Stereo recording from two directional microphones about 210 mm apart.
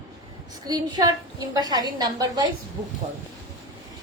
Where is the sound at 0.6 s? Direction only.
20° right (ahead or behind).